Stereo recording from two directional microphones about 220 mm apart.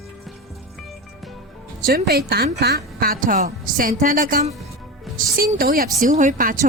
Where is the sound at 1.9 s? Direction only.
45° right (ahead or behind).